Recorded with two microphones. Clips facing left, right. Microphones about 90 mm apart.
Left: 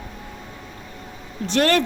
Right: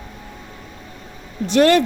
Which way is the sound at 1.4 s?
20° right (ahead or behind).